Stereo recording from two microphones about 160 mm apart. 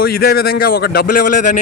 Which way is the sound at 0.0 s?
75° left (ahead or behind).